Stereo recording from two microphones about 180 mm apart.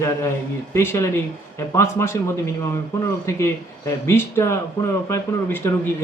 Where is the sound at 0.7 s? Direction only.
15° left (ahead or behind).